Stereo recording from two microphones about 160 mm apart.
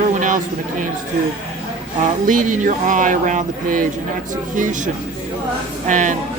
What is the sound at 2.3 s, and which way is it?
Speech, 55° right (ahead or behind).